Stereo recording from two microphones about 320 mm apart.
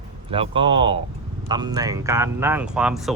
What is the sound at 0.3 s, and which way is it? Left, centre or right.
Speech, centre.